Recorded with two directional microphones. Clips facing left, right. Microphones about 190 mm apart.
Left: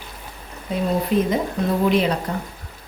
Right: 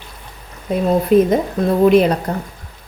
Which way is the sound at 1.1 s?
50° right (ahead or behind).